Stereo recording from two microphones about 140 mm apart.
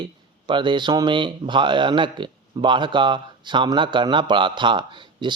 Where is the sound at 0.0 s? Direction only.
35° right (ahead or behind).